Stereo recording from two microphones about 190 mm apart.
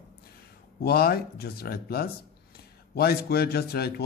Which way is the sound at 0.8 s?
55° left (ahead or behind).